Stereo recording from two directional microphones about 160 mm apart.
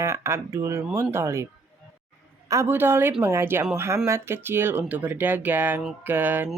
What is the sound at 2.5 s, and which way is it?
Speech, 15° right (ahead or behind).